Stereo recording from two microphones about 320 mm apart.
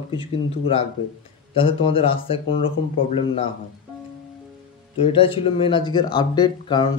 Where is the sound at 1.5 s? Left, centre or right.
Centre.